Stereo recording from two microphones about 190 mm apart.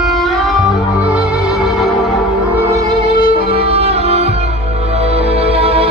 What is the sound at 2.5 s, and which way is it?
Violin, 15° right (ahead or behind).